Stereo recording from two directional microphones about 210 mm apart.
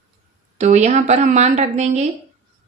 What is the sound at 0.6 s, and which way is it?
A woman's voice, 35° right (ahead or behind).